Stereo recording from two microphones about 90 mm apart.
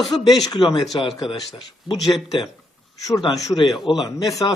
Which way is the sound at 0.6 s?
55° left (ahead or behind).